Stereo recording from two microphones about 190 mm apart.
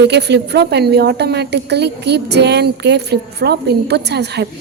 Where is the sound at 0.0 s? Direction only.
60° right (ahead or behind).